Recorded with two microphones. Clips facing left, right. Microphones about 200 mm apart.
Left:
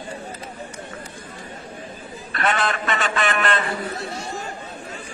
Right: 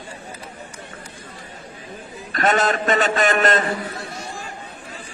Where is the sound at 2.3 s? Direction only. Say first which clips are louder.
Right 4 dB; 40° right (ahead or behind).